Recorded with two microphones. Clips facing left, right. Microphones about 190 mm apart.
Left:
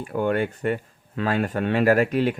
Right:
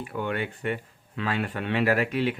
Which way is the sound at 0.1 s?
45° left (ahead or behind).